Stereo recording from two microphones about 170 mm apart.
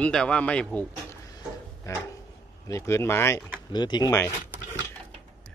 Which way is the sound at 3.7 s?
25° left (ahead or behind).